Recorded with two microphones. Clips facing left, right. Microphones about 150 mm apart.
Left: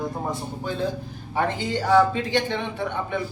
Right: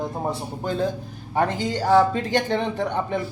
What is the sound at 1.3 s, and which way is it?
A man's voice, 40° right (ahead or behind).